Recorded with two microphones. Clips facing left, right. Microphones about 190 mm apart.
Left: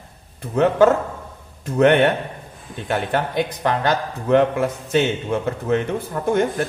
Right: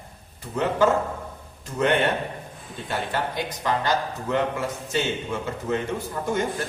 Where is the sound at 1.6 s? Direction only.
60° left (ahead or behind).